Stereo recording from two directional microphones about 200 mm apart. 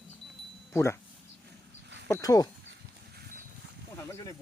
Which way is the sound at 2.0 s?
15° left (ahead or behind).